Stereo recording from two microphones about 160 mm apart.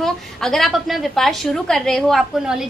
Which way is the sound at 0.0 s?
Centre (ahead or behind).